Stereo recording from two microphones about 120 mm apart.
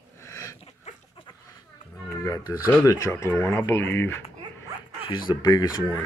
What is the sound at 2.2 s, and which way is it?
Speech, 30° left (ahead or behind).